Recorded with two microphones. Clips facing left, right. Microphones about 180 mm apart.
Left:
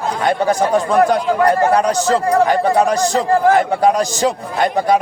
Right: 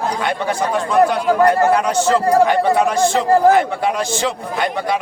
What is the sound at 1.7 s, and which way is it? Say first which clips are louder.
Speech: left 1 dB; 35° left (ahead or behind).